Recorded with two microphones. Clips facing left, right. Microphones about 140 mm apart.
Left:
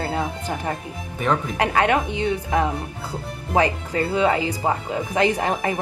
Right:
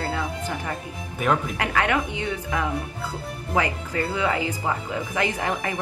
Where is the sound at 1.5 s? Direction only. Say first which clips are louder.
Left 4 dB; 30° left (ahead or behind).